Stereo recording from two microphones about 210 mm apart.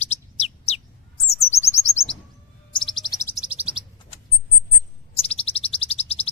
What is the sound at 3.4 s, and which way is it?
Chirp, 5° right (ahead or behind).